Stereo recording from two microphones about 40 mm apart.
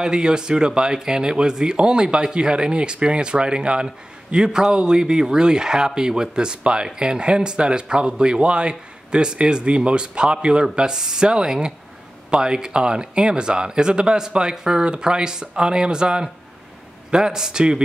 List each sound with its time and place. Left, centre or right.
0.0 s speech: centre